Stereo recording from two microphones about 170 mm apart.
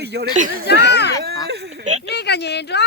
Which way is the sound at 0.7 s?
85° left.